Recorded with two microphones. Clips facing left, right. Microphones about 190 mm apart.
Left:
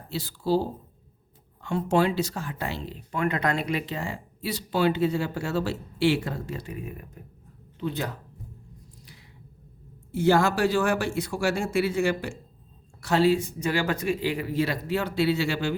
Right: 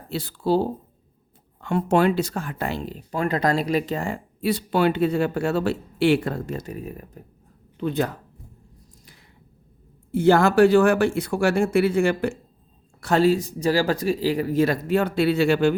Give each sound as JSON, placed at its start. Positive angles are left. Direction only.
{"t": 0.1, "sound": "speech", "side_deg": -60}
{"t": 7.8, "sound": "speech", "side_deg": -55}
{"t": 10.1, "sound": "speech", "side_deg": -55}